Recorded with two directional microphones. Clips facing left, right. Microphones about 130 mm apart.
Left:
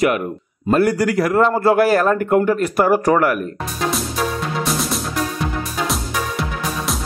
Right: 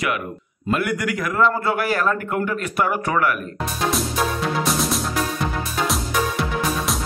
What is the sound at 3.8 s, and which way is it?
Music, centre (ahead or behind).